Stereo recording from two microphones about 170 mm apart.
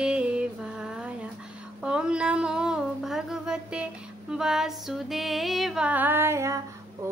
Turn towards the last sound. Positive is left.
turn(degrees=-15)  # may be behind; listen again after turning